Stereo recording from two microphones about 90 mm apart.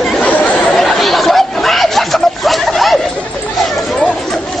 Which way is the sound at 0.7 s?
5° left (ahead or behind).